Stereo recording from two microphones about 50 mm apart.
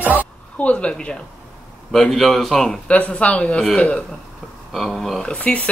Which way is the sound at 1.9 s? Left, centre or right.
Centre.